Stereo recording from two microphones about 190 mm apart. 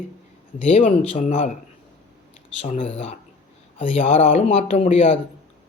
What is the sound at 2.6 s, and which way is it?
Speech, 40° left (ahead or behind).